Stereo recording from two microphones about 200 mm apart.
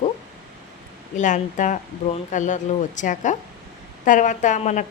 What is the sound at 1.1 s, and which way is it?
Speech, 40° left (ahead or behind).